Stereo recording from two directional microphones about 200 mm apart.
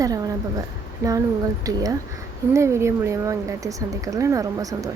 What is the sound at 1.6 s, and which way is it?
A woman's voice, 15° right (ahead or behind).